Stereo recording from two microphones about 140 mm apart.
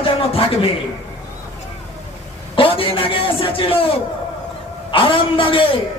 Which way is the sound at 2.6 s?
40° left (ahead or behind).